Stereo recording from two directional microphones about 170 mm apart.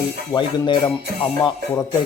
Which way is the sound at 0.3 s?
30° left (ahead or behind).